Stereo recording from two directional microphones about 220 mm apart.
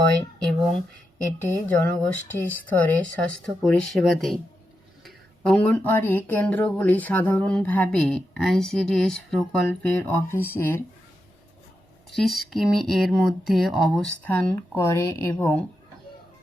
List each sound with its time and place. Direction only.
0.4 s speech: centre (ahead or behind)
12.1 s speech: centre (ahead or behind)